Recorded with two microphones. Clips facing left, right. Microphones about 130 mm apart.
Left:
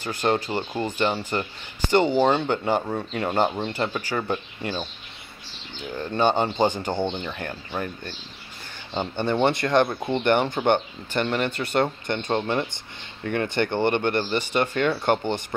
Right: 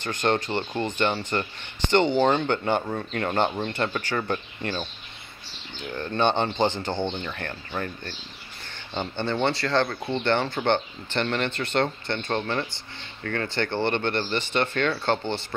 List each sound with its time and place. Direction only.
0.0 s speech: 5° left (ahead or behind)